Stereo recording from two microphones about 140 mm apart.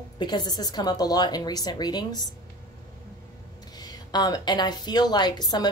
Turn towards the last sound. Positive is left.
turn(degrees=30)  # may be behind; listen again after turning